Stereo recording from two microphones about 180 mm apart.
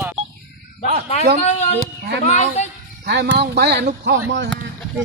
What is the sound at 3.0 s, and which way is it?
Speech, 70° right (ahead or behind).